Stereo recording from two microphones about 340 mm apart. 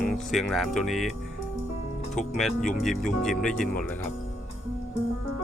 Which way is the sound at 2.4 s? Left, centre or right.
Centre.